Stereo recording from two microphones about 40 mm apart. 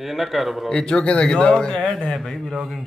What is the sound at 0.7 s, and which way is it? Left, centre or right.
Speech, left.